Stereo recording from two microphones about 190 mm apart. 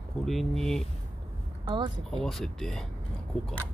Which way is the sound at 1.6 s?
25° right (ahead or behind).